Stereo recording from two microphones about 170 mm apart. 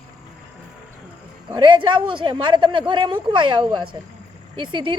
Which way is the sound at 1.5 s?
25° right (ahead or behind).